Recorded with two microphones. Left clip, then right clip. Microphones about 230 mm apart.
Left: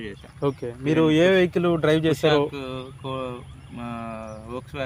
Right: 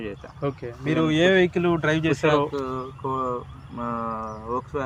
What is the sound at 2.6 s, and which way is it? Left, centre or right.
Mantra, left.